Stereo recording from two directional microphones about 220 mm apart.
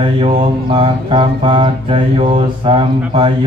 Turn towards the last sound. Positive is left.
turn(degrees=-25)  # may be behind; listen again after turning